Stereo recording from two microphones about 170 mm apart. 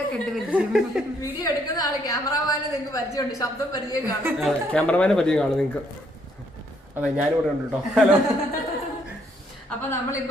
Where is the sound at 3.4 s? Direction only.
20° left (ahead or behind).